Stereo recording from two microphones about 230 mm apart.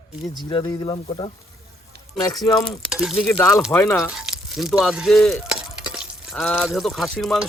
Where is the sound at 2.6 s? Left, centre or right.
Centre.